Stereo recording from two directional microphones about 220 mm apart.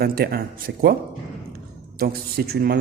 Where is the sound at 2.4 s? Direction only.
45° right (ahead or behind).